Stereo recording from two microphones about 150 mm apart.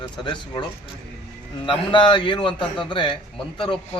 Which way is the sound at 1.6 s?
35° left (ahead or behind).